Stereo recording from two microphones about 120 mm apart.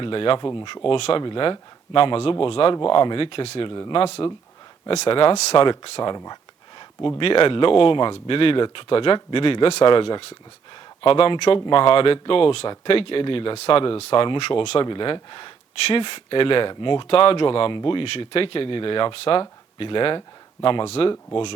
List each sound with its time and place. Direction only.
0.0 s speech: 50° left (ahead or behind)
0.9 s speech: 55° left (ahead or behind)
3.8 s speech: 40° left (ahead or behind)
4.9 s speech: 50° left (ahead or behind)
5.5 s speech: 45° left (ahead or behind)
6.1 s a sound: 35° left (ahead or behind)
7.2 s speech: 50° left (ahead or behind)
14.8 s speech: 40° left (ahead or behind)
20.8 s speech: 60° left (ahead or behind)